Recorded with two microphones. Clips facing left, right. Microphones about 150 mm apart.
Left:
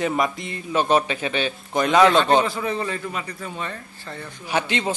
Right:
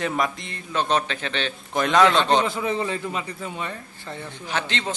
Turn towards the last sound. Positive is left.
turn(degrees=10)  # may be behind; listen again after turning